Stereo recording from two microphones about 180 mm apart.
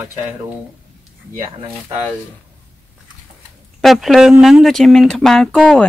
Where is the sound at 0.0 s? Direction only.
15° right (ahead or behind).